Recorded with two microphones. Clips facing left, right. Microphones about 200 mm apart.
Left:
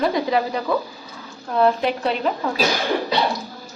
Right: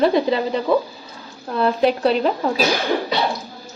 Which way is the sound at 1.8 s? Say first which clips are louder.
Right 5 dB; 35° right (ahead or behind).